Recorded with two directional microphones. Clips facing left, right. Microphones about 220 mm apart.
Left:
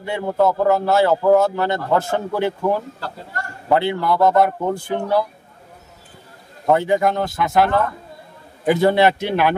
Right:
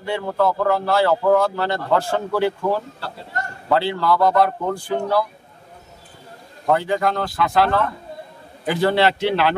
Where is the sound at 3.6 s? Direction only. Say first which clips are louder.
Left 1 dB; 20° left (ahead or behind).